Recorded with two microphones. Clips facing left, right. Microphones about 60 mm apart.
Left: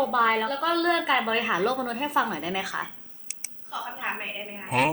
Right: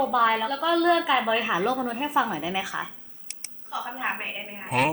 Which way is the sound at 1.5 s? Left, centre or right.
Left.